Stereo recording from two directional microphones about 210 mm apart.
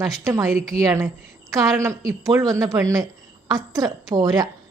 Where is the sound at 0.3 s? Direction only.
15° right (ahead or behind).